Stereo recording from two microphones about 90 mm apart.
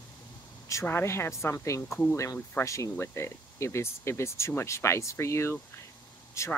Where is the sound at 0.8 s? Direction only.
30° left (ahead or behind).